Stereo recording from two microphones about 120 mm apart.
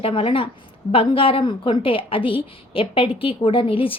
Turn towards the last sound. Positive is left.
turn(degrees=50)  # may be behind; listen again after turning